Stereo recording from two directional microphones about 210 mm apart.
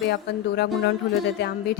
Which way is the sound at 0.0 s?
55° left (ahead or behind).